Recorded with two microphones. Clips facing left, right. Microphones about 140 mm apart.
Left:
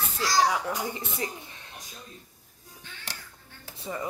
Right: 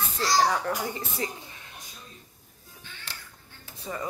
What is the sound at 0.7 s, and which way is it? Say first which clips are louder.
Speech: right 1 dB; 25° left (ahead or behind).